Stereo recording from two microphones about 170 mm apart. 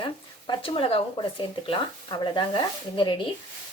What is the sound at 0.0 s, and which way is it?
Speech, 30° left (ahead or behind).